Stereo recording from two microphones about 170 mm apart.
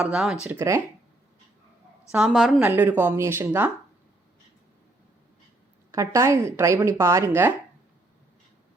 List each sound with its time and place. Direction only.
0.0 s speech: 5° right (ahead or behind)
2.1 s speech: centre (ahead or behind)
5.9 s speech: 20° right (ahead or behind)